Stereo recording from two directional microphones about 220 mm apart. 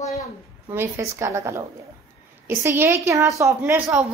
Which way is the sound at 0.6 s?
10° right (ahead or behind).